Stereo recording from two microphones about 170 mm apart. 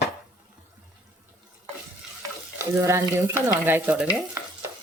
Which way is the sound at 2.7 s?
15° right (ahead or behind).